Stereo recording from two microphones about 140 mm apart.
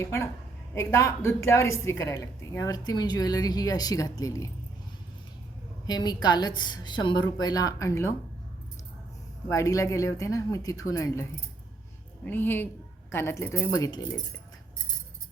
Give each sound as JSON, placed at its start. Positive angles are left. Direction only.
{"t": 0.0, "sound": "a woman's voice", "side_deg": 20}
{"t": 5.8, "sound": "a woman's voice", "side_deg": 30}
{"t": 9.5, "sound": "a woman's voice", "side_deg": 25}